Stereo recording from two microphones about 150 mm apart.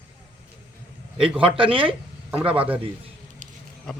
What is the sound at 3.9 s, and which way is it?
Speech, 5° left (ahead or behind).